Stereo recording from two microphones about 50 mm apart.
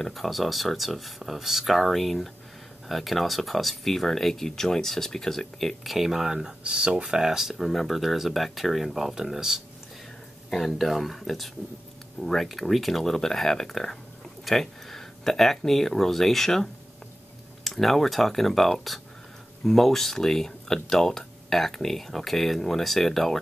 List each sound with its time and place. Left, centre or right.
0.0 s speech: centre
5.9 s speech: centre
7.5 s speech: centre